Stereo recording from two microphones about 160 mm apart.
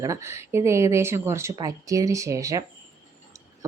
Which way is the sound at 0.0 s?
20° right (ahead or behind).